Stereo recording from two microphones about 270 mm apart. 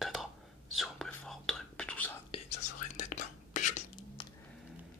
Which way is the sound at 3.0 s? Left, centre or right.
Left.